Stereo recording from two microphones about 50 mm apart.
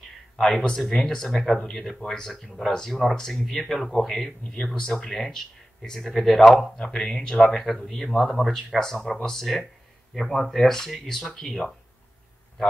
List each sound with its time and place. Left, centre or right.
0.4 s speech: centre
5.1 s speech: centre